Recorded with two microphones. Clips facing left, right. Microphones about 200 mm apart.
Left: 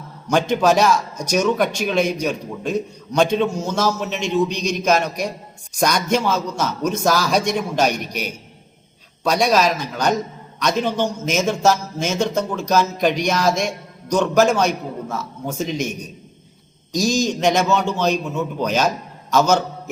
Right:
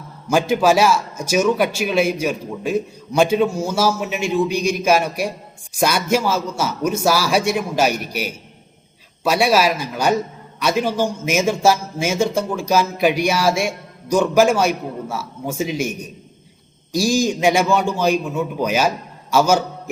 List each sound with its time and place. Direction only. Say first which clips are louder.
0.3 s a man's voice: right 1 dB; 5° right (ahead or behind)